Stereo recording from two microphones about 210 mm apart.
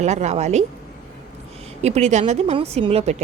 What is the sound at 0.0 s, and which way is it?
Speech, 35° right (ahead or behind).